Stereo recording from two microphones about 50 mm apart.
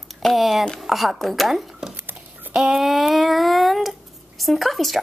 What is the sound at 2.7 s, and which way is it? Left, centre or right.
Speech, centre.